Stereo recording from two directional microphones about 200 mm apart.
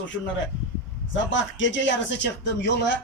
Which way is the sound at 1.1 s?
65° left (ahead or behind).